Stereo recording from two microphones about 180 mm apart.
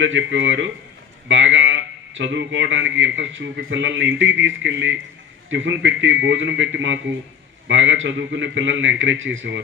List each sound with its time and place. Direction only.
0.0 s a man's voice: 90° right